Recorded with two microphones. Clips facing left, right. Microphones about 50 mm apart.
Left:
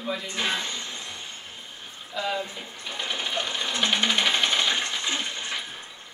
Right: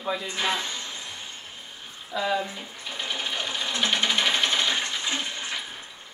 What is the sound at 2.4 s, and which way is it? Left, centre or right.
Sewing machine, centre.